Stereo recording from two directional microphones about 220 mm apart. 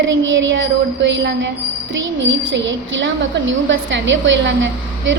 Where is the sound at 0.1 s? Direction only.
60° right (ahead or behind).